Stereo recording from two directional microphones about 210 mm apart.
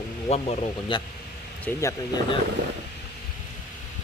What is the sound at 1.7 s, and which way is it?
Speech, 10° left (ahead or behind).